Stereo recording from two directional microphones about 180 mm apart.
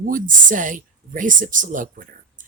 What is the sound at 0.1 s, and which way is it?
Speech, 45° right (ahead or behind).